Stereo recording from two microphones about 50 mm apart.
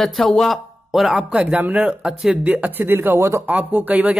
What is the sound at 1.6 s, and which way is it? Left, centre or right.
Speech, right.